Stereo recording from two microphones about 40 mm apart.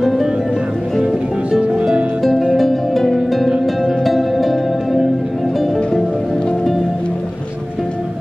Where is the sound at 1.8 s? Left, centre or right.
Right.